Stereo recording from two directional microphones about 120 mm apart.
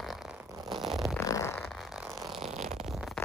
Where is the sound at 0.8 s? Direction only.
Centre (ahead or behind).